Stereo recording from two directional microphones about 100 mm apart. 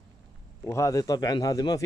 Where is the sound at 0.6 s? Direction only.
30° left (ahead or behind).